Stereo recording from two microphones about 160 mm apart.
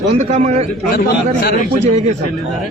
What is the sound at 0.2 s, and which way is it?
Speech, 45° right (ahead or behind).